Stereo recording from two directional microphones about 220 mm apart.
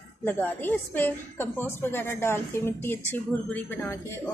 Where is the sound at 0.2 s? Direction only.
10° left (ahead or behind).